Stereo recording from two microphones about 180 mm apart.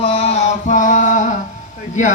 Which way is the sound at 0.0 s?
35° left (ahead or behind).